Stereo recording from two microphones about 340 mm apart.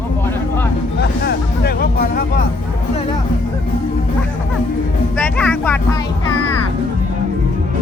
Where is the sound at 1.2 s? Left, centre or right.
Left.